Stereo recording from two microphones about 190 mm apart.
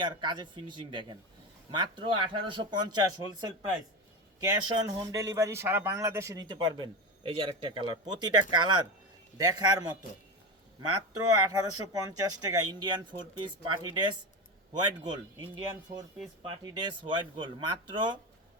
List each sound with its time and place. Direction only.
0.0 s speech: 25° right (ahead or behind)
11.3 s speech: 20° right (ahead or behind)
16.4 s speech: 25° right (ahead or behind)